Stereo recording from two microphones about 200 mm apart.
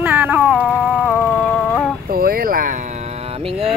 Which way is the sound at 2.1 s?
50° right (ahead or behind).